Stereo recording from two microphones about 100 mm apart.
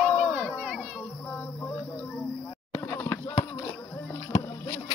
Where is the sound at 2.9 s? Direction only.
30° left (ahead or behind).